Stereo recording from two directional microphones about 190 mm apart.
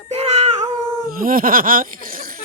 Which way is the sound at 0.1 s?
35° right (ahead or behind).